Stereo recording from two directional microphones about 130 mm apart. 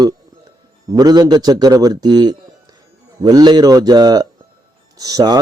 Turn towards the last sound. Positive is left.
turn(degrees=-30)  # may be behind; listen again after turning